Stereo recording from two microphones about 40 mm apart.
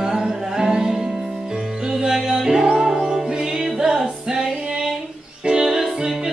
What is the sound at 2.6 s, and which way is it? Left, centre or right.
Music, centre.